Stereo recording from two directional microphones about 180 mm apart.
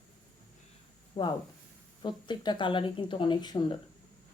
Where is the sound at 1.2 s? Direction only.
25° left (ahead or behind).